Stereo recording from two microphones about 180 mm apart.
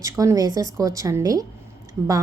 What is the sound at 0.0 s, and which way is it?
A woman's voice, 20° right (ahead or behind).